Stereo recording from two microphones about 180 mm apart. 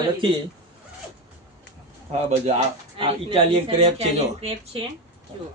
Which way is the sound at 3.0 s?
30° right (ahead or behind).